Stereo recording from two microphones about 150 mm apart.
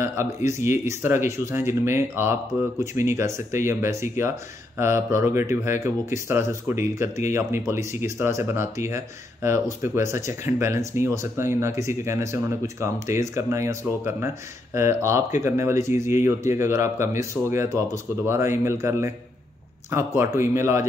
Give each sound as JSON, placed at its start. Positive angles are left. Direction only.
{"t": 0.0, "sound": "speech", "side_deg": -20}